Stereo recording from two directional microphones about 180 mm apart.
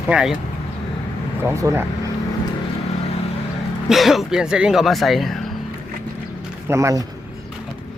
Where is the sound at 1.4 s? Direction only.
15° right (ahead or behind).